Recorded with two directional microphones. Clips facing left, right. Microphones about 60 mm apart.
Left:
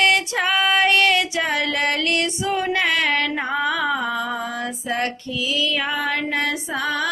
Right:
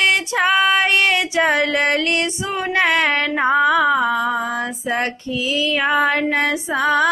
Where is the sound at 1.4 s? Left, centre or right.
Right.